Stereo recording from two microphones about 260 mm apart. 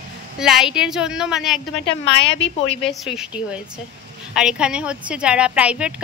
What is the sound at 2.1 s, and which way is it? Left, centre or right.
Speech, left.